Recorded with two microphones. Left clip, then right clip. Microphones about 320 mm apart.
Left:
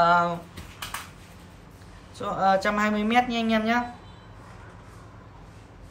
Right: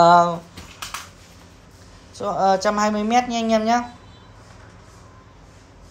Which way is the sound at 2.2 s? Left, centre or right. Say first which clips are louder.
Right 4 dB; centre.